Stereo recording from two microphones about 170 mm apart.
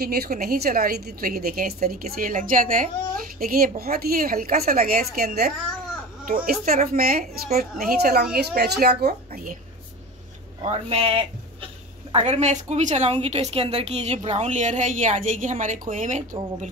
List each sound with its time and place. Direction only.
0.0 s a woman's voice: 65° right (ahead or behind)
10.6 s a woman's voice: 35° right (ahead or behind)